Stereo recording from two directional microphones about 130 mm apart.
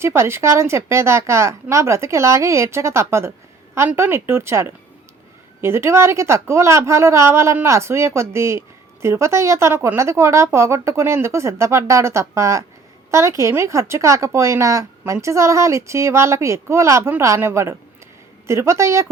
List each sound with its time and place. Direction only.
0.0 s speech: 20° right (ahead or behind)